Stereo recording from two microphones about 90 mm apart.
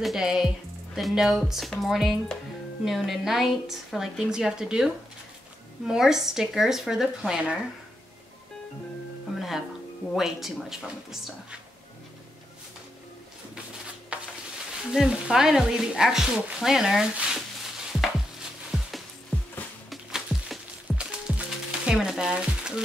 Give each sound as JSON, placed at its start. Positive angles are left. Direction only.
{"t": 0.0, "sound": "a woman's voice", "side_deg": -5}
{"t": 10.1, "sound": "a woman's voice", "side_deg": -5}
{"t": 14.1, "sound": "a sound", "side_deg": -15}
{"t": 14.9, "sound": "speech", "side_deg": -5}
{"t": 18.7, "sound": "music", "side_deg": 0}